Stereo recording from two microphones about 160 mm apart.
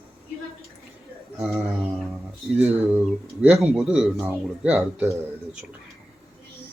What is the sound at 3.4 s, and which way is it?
Speech, 5° right (ahead or behind).